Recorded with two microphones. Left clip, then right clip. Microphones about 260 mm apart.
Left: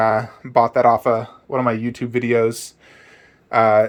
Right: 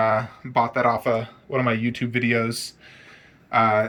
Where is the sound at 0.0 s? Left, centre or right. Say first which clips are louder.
Left 4 dB; left.